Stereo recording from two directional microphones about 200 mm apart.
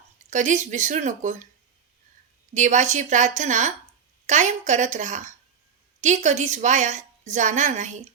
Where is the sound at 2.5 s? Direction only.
35° right (ahead or behind).